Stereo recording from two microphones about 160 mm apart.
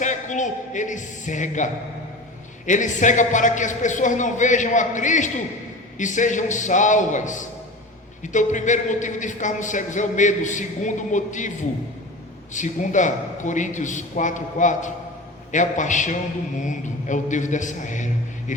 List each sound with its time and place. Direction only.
0.0 s speech: 50° left (ahead or behind)
12.5 s a man's voice: 50° left (ahead or behind)